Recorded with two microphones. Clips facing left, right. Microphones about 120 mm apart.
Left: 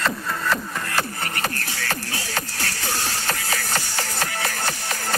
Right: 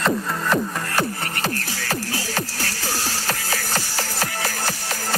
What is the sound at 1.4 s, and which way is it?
Music, 35° right (ahead or behind).